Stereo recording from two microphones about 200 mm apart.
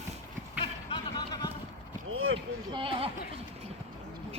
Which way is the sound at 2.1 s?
90° right.